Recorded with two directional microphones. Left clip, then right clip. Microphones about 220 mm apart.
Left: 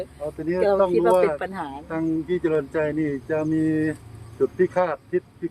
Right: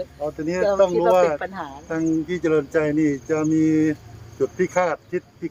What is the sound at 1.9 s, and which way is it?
Speech, 50° right (ahead or behind).